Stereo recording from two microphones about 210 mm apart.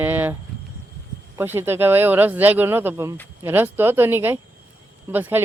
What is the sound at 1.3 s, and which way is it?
Speech, 10° right (ahead or behind).